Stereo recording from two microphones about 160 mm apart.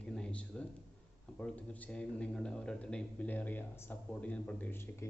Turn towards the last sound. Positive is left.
turn(degrees=15)  # may be behind; listen again after turning